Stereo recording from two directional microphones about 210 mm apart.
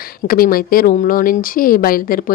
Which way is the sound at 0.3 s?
45° left (ahead or behind).